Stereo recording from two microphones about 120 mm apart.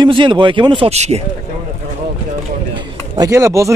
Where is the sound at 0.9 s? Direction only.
65° right (ahead or behind).